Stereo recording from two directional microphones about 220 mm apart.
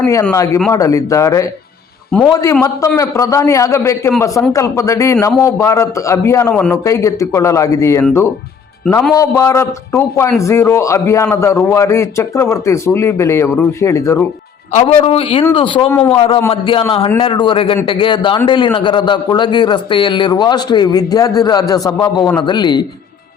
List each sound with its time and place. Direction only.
0.0 s a man's voice: 10° left (ahead or behind)
14.7 s a man's voice: 30° left (ahead or behind)